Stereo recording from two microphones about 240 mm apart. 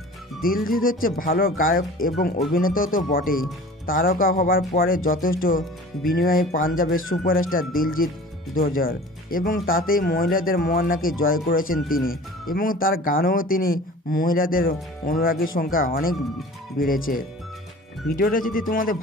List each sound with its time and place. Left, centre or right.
0.4 s speech: left